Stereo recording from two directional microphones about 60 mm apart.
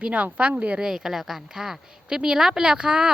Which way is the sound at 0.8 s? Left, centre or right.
Centre.